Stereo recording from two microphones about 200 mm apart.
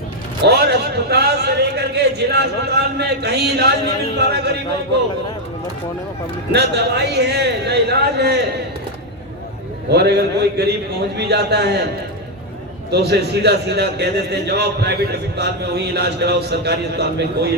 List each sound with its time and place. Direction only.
0.4 s a man's voice: 55° right (ahead or behind)
6.5 s a man's voice: 55° right (ahead or behind)
9.9 s a man's voice: 55° right (ahead or behind)
12.9 s a man's voice: 55° right (ahead or behind)